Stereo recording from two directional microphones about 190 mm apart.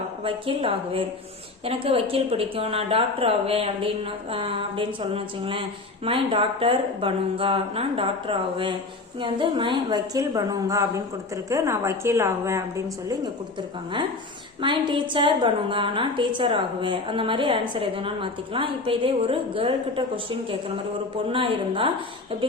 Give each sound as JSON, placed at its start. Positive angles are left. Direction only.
{"t": 0.2, "sound": "a woman's voice", "side_deg": -30}
{"t": 14.6, "sound": "a woman's voice", "side_deg": -25}
{"t": 21.2, "sound": "a woman's voice", "side_deg": -25}